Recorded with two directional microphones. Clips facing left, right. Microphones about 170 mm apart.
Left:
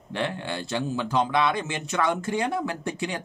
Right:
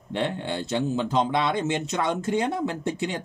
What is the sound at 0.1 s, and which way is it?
Speech, 20° right (ahead or behind).